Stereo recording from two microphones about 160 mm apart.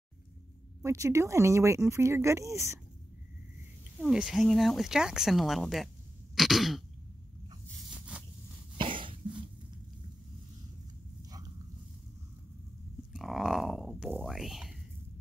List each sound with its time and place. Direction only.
0.8 s speech: 20° right (ahead or behind)
4.0 s speech: 5° right (ahead or behind)
6.3 s throat clearing: centre (ahead or behind)
8.1 s a sound: 10° right (ahead or behind)
8.7 s cough: 30° right (ahead or behind)
13.1 s speech: centre (ahead or behind)